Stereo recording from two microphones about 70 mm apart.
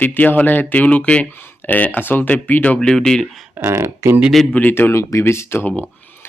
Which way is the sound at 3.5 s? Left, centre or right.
Right.